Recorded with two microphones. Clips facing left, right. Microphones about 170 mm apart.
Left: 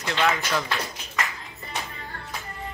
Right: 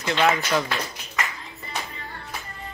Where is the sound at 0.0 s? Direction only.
20° right (ahead or behind).